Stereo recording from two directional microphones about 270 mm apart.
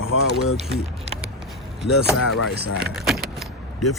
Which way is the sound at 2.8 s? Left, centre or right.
Centre.